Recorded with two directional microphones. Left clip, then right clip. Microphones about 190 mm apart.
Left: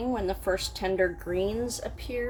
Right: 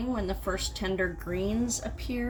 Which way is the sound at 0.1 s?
45° left (ahead or behind).